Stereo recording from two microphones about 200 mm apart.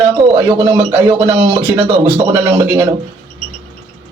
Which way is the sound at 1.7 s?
25° right (ahead or behind).